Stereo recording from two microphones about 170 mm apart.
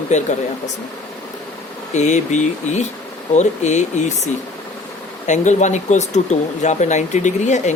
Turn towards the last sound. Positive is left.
turn(degrees=45)  # may be behind; listen again after turning